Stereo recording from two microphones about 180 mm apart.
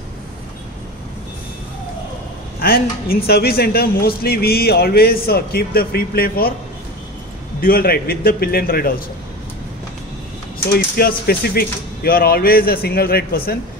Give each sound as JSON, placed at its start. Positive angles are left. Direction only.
{"t": 2.6, "sound": "speech", "side_deg": 55}
{"t": 7.6, "sound": "speech", "side_deg": 55}
{"t": 10.7, "sound": "speech", "side_deg": 55}